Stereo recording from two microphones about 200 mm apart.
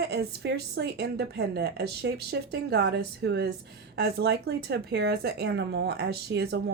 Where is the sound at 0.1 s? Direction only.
55° right (ahead or behind).